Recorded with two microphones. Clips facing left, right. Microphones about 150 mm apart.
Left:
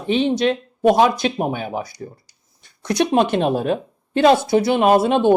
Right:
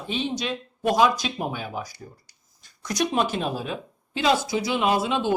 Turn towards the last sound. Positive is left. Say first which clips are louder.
# left 8 dB
turn(degrees=60)  # may be behind; listen again after turning